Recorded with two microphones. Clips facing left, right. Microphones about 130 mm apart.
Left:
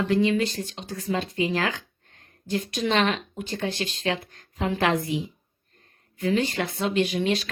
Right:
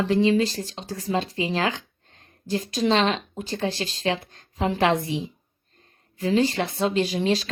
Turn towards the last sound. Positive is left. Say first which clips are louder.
# right 1 dB
turn(degrees=-30)  # may be behind; listen again after turning